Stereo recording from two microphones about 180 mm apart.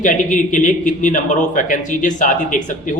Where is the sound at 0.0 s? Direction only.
45° left (ahead or behind).